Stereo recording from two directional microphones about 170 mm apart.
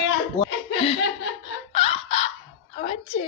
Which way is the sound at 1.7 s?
35° left (ahead or behind).